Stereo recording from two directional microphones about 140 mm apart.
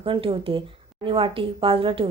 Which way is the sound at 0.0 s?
40° right (ahead or behind).